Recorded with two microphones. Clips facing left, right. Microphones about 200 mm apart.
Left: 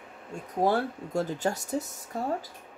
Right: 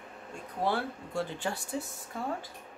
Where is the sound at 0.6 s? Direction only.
40° left (ahead or behind).